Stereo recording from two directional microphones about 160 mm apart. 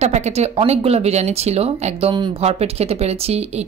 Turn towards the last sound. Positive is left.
turn(degrees=-40)  # may be behind; listen again after turning